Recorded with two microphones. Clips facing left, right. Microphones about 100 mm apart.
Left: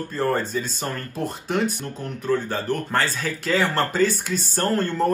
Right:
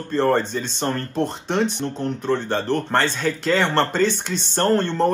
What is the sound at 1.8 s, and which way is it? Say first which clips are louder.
Speech: right 5 dB; 25° right (ahead or behind).